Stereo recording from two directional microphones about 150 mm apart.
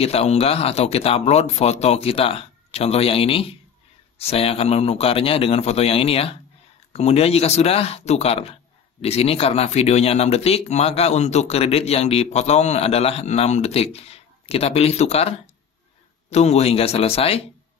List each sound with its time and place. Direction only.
0.0 s speech: 45° left (ahead or behind)